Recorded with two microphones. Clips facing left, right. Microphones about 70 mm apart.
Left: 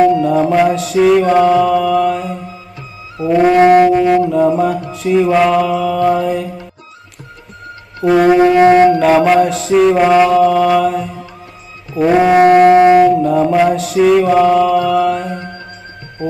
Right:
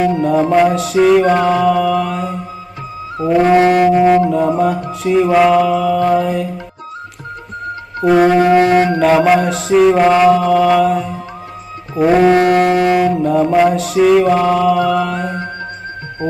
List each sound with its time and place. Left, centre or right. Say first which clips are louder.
0.2 s music: even; centre
3.6 s wind instrument: left 4 dB; left
4.3 s music: left 1 dB; centre
8.0 s music: left 1 dB; centre
12.4 s wind instrument: left 4 dB; left
12.6 s music: left 6 dB; left
13.0 s music: left 3 dB; centre